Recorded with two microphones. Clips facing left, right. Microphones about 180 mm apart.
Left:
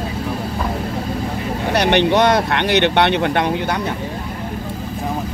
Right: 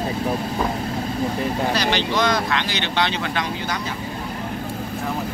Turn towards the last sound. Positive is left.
turn(degrees=60)  # may be behind; listen again after turning